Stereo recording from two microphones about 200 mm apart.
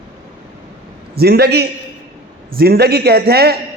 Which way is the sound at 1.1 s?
50° right (ahead or behind).